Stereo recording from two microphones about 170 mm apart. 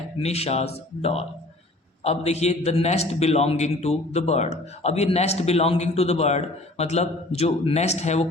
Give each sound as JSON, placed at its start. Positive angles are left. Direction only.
{"t": 0.2, "sound": "a man's voice", "side_deg": 40}